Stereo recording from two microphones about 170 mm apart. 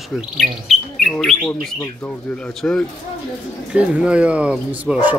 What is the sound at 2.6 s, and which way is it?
Speech, 5° left (ahead or behind).